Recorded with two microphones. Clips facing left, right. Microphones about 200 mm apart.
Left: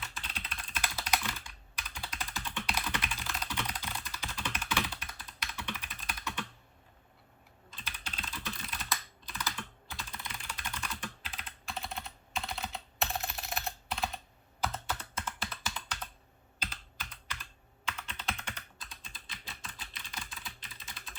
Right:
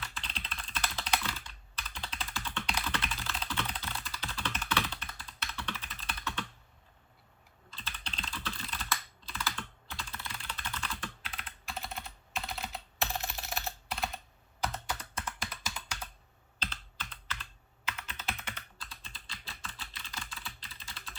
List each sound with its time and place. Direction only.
0.0 s computer keyboard: 5° left (ahead or behind)
7.9 s typing: 10° left (ahead or behind)
8.9 s computer keyboard: 15° left (ahead or behind)
11.2 s computer keyboard: centre (ahead or behind)
14.8 s computer keyboard: 15° right (ahead or behind)
16.6 s computer keyboard: 10° left (ahead or behind)
17.8 s computer keyboard: 5° right (ahead or behind)
18.8 s computer keyboard: 20° left (ahead or behind)
19.8 s typing: 20° left (ahead or behind)